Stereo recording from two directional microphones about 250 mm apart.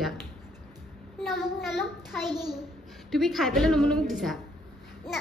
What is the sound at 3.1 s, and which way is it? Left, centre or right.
A woman's voice, centre.